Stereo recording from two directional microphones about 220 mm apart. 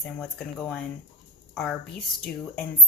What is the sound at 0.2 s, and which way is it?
Speech, centre (ahead or behind).